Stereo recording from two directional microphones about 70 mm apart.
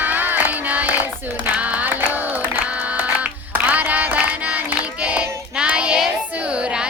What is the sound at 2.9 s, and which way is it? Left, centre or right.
Music, right.